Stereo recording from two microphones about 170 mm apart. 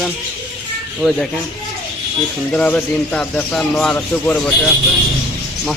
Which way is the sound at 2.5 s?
5° left (ahead or behind).